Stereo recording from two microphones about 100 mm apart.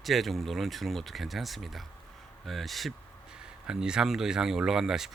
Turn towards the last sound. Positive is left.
turn(degrees=-5)  # may be behind; listen again after turning